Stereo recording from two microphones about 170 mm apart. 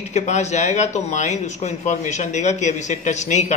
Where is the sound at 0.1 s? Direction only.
45° left (ahead or behind).